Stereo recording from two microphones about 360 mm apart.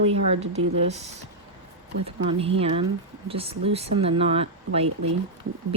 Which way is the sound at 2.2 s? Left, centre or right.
Centre.